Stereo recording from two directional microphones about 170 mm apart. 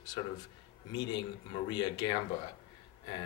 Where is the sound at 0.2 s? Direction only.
30° left (ahead or behind).